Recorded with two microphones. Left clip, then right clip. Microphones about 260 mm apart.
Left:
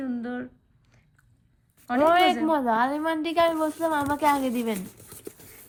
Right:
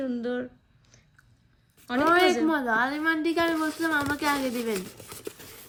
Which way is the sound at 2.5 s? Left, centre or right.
Left.